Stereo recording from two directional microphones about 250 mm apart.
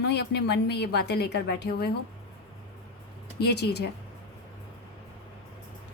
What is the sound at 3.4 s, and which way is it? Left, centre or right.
Speech, left.